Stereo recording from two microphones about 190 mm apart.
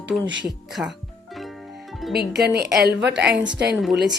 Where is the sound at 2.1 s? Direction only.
55° right (ahead or behind).